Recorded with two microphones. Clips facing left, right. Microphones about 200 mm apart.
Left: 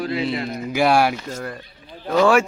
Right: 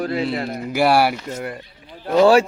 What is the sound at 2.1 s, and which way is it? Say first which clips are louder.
Speech: right 3 dB; 25° right (ahead or behind).